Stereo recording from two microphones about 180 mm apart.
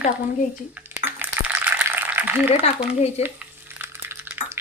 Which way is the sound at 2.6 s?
35° left (ahead or behind).